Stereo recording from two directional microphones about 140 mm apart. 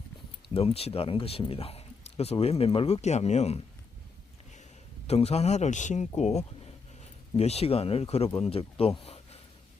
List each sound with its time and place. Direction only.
0.4 s speech: 45° left (ahead or behind)
5.0 s speech: 50° left (ahead or behind)
9.0 s a sound: 45° left (ahead or behind)